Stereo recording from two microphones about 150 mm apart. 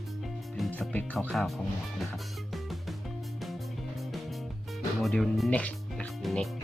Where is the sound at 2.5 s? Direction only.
Centre (ahead or behind).